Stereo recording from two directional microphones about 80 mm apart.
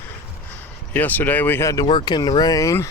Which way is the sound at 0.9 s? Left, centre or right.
Left.